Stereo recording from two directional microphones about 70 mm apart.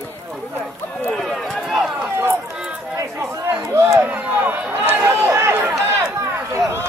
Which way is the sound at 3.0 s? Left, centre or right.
Right.